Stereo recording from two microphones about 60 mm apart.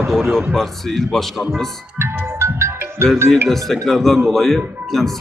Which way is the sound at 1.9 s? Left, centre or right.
Right.